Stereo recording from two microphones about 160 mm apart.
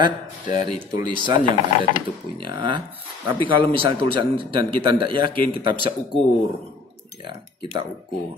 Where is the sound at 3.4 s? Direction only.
30° right (ahead or behind).